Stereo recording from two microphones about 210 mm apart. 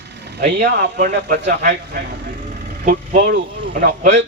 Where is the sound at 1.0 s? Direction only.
55° right (ahead or behind).